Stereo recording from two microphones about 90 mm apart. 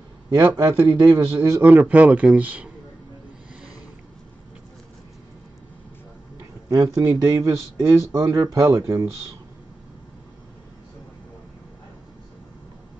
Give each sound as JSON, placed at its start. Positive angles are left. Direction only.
{"t": 0.6, "sound": "speech", "side_deg": -35}
{"t": 1.8, "sound": "speech", "side_deg": -20}
{"t": 6.7, "sound": "speech", "side_deg": -40}